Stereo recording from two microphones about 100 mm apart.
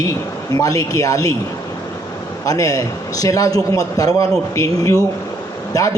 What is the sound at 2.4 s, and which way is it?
A man's voice, 35° left (ahead or behind).